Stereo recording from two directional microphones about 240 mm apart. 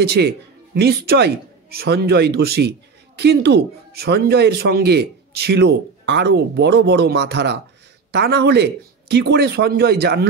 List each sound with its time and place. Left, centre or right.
0.2 s speech: right